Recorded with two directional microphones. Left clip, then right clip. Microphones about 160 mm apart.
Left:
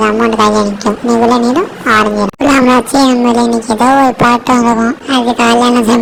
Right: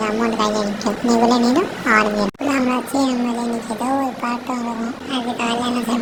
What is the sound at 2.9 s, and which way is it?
Speech, 50° left (ahead or behind).